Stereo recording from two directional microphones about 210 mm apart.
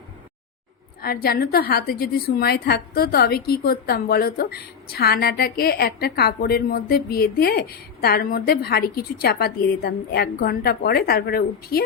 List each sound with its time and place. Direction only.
1.0 s a woman's voice: 45° left (ahead or behind)